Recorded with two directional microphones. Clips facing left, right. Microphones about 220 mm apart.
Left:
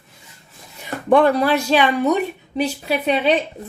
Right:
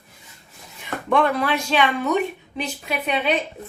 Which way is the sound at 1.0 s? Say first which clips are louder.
Left 6 dB; 35° left (ahead or behind).